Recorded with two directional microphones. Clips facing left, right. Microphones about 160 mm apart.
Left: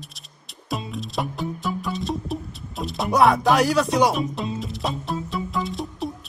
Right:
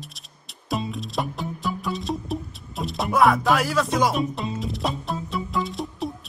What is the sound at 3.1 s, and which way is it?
Music, 20° left (ahead or behind).